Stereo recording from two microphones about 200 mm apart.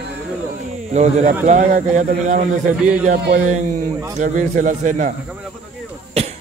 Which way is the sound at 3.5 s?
35° right (ahead or behind).